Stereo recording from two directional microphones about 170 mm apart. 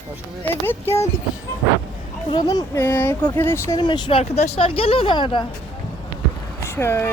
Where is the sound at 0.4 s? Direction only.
15° left (ahead or behind).